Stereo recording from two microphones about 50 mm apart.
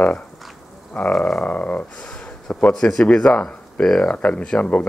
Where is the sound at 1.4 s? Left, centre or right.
Left.